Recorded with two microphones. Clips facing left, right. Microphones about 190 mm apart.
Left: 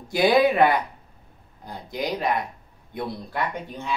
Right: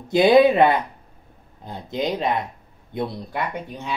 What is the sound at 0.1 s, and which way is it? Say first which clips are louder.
Speech: right 5 dB; 25° right (ahead or behind).